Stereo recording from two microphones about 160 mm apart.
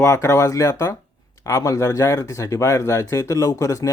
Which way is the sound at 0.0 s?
15° left (ahead or behind).